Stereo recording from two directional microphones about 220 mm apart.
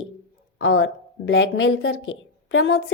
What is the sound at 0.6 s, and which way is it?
A woman's voice, 60° left (ahead or behind).